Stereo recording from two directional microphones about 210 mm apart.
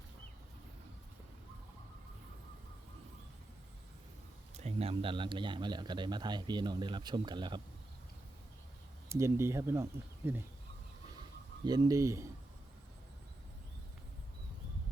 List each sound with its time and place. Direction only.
4.5 s a man's voice: 30° right (ahead or behind)
9.0 s speech: 15° right (ahead or behind)
11.6 s speech: 20° right (ahead or behind)